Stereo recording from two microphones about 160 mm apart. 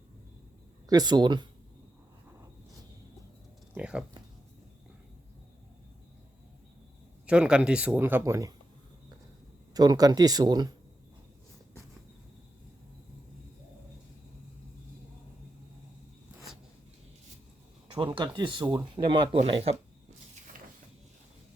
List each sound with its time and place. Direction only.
0.9 s speech: 25° right (ahead or behind)
3.8 s a sound: 5° right (ahead or behind)
7.3 s speech: 5° right (ahead or behind)
9.7 s speech: 25° right (ahead or behind)
17.9 s speech: 30° right (ahead or behind)